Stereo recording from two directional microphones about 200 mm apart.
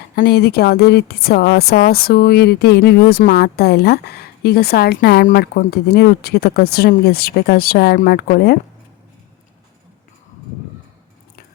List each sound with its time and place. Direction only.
0.2 s speech: 50° left (ahead or behind)